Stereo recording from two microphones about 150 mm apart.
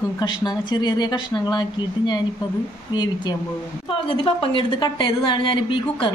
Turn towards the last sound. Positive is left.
turn(degrees=35)  # may be behind; listen again after turning